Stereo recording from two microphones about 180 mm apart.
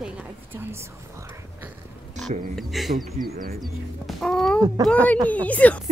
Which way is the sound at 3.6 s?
Centre (ahead or behind).